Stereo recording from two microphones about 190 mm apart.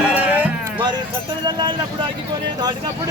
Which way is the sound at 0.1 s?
10° right (ahead or behind).